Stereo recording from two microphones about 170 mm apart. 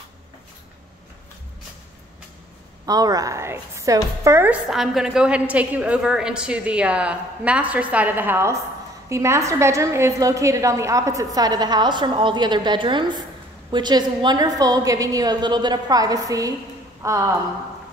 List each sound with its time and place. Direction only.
2.9 s a woman's voice: 20° right (ahead or behind)